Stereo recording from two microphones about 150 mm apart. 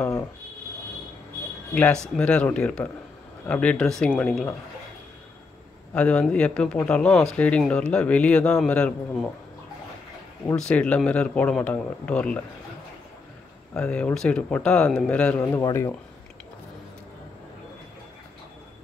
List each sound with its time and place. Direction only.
0.0 s speech: 15° left (ahead or behind)
1.7 s speech: 5° left (ahead or behind)
5.9 s speech: 5° left (ahead or behind)
10.5 s speech: 5° left (ahead or behind)
13.7 s speech: 5° left (ahead or behind)